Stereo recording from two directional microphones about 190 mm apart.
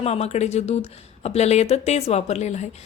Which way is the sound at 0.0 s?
35° left (ahead or behind).